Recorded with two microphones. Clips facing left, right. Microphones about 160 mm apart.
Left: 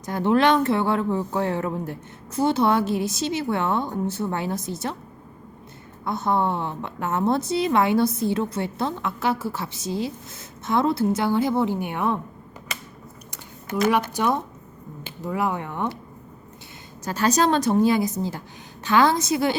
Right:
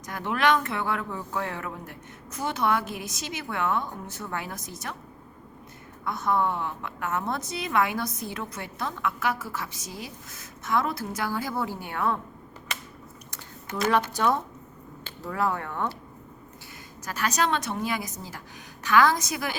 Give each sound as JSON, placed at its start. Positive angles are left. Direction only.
{"t": 0.0, "sound": "a woman's voice", "side_deg": 30}
{"t": 6.1, "sound": "a woman's voice", "side_deg": 30}
{"t": 13.3, "sound": "speech", "side_deg": 15}
{"t": 17.1, "sound": "a woman's voice", "side_deg": 30}